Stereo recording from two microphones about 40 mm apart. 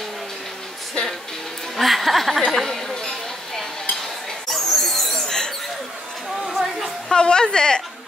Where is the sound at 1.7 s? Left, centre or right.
Centre.